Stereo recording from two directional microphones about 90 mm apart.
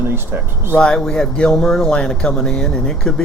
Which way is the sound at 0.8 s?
10° left (ahead or behind).